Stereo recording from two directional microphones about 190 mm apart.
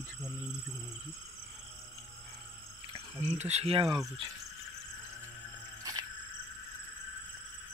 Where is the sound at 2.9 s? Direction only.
30° right (ahead or behind).